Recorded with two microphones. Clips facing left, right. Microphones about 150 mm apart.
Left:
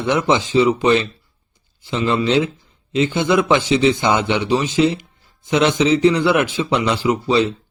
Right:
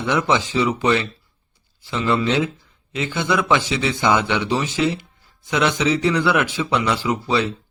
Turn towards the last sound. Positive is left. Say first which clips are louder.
# left 4 dB
turn(degrees=20)  # may be behind; listen again after turning